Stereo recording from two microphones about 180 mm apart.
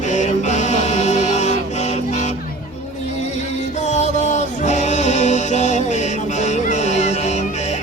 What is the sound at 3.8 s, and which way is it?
Music, 40° left (ahead or behind).